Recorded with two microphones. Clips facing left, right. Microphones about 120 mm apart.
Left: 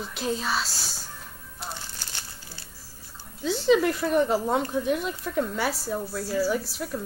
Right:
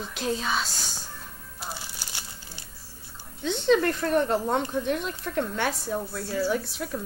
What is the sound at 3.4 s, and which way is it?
Speech, 5° left (ahead or behind).